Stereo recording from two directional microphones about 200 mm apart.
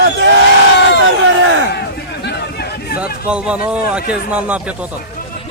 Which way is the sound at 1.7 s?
55° left (ahead or behind).